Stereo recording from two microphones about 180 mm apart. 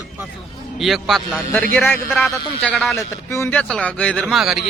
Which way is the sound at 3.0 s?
15° left (ahead or behind).